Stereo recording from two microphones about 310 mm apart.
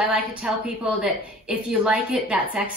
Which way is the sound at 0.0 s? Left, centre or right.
Centre.